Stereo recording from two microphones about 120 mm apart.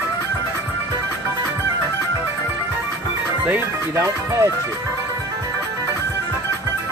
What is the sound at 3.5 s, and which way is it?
Speech, 20° right (ahead or behind).